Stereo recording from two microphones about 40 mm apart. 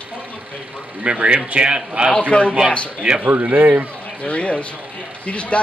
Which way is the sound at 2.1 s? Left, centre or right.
Left.